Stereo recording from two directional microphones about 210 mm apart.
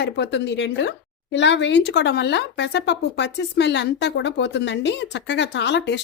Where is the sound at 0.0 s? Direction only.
55° left (ahead or behind).